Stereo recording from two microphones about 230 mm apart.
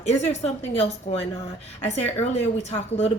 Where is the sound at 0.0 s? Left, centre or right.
Left.